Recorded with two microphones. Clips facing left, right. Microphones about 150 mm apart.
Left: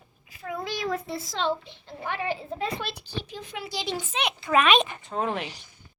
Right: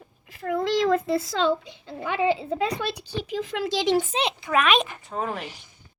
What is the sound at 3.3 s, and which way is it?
Speech, 90° right.